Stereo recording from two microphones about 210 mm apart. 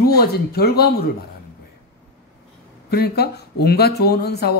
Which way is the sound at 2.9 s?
50° left (ahead or behind).